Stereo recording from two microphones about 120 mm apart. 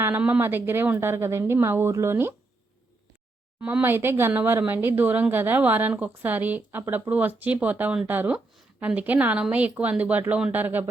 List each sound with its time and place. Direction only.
0.0 s a woman's voice: 15° right (ahead or behind)
3.6 s speech: 10° right (ahead or behind)